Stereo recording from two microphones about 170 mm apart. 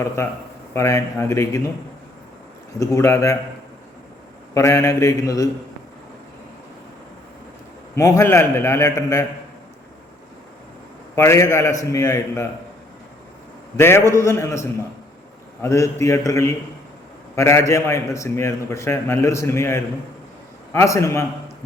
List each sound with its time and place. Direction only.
0.2 s a man's voice: 15° left (ahead or behind)
2.7 s mantra: 20° left (ahead or behind)
4.5 s mantra: 15° left (ahead or behind)
7.9 s a man's voice: 20° left (ahead or behind)
11.1 s a man's voice: 15° left (ahead or behind)
13.7 s a man's voice: 15° left (ahead or behind)